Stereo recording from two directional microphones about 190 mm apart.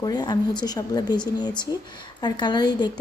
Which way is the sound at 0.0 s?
20° left (ahead or behind).